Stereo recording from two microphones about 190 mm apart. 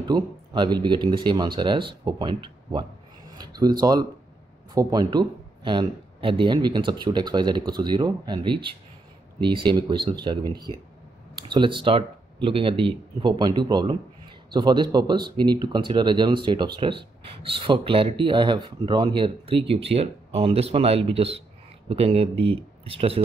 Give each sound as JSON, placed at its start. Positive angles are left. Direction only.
{"t": 0.0, "sound": "speech", "side_deg": -20}